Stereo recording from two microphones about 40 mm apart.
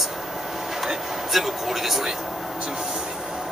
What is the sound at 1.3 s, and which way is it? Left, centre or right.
Speech, centre.